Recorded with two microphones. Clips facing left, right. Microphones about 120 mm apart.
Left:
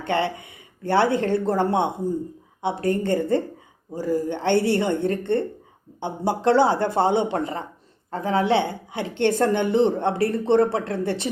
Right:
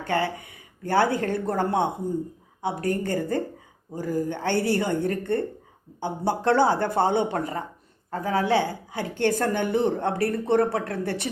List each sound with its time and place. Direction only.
0.0 s a woman's voice: 25° left (ahead or behind)